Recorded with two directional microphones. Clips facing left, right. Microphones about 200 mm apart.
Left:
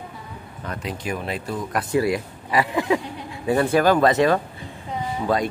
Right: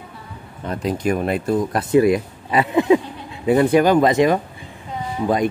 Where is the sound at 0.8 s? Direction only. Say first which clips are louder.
Right 9 dB; 50° right (ahead or behind).